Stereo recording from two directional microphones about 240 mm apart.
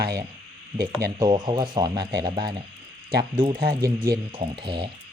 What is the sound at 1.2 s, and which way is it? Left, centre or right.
Speech, centre.